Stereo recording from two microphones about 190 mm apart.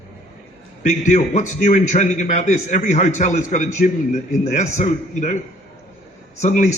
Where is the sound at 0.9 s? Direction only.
35° left (ahead or behind).